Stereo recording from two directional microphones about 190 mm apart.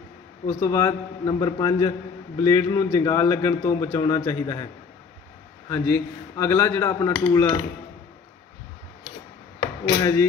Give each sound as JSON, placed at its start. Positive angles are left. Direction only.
{"t": 0.5, "sound": "a man's voice", "side_deg": 15}
{"t": 5.7, "sound": "a man's voice", "side_deg": 10}